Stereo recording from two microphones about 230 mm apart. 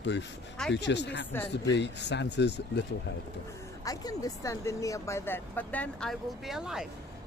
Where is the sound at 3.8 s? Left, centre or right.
Centre.